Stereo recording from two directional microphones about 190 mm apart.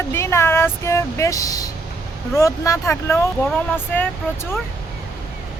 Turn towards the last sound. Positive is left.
turn(degrees=10)  # may be behind; listen again after turning